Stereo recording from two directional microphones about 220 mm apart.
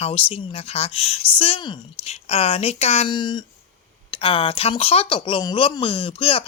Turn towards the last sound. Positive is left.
turn(degrees=25)  # may be behind; listen again after turning